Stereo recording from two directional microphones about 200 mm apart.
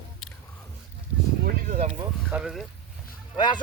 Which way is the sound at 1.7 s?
35° right (ahead or behind).